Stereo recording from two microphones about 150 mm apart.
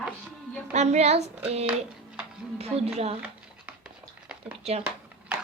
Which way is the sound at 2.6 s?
40° right (ahead or behind).